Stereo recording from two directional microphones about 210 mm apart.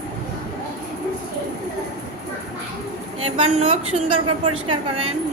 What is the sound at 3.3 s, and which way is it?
A woman's voice, 30° right (ahead or behind).